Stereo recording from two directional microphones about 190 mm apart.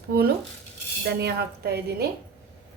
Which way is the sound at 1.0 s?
55° right (ahead or behind).